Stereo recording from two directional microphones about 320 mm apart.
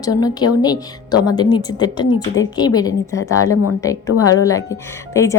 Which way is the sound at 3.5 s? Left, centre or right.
Left.